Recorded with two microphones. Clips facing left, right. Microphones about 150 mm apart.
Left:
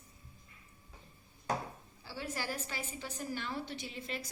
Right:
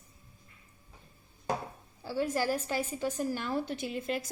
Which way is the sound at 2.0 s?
45° right (ahead or behind).